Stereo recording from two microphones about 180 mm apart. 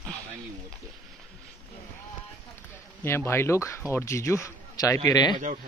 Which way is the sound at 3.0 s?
15° left (ahead or behind).